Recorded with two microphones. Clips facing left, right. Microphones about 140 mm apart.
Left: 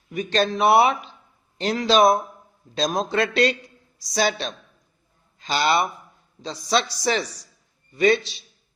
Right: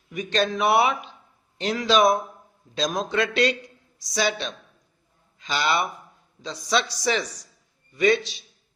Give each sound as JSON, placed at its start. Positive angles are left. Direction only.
{"t": 0.1, "sound": "speech", "side_deg": 35}